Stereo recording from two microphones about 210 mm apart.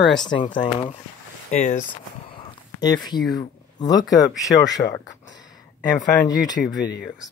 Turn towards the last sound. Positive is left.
turn(degrees=55)  # may be behind; listen again after turning